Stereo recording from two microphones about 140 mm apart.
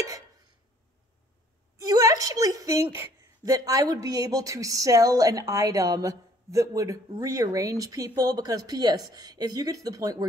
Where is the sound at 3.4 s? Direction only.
25° right (ahead or behind).